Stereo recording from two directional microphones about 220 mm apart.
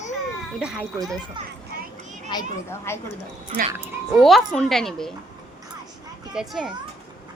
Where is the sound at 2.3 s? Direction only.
15° left (ahead or behind).